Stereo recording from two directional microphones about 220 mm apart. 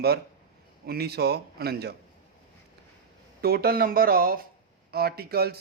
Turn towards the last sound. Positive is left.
turn(degrees=-45)  # may be behind; listen again after turning